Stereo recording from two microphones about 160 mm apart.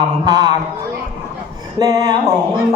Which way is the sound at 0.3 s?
25° right (ahead or behind).